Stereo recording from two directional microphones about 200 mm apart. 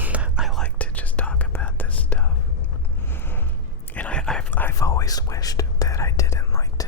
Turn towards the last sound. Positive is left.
turn(degrees=15)  # may be behind; listen again after turning